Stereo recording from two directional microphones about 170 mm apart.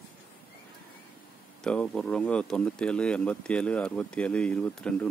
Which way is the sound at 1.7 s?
5° left (ahead or behind).